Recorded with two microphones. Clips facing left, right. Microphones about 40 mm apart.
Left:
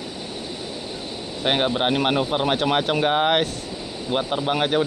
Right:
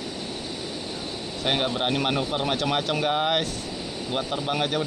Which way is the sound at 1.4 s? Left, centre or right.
Left.